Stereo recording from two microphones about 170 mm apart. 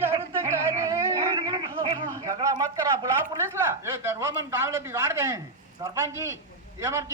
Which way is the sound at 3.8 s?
15° right (ahead or behind).